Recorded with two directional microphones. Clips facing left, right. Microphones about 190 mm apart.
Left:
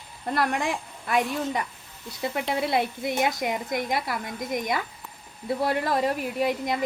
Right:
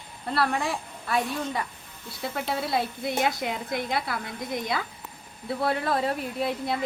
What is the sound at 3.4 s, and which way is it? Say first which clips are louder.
A woman's voice: left 2 dB; 15° left (ahead or behind).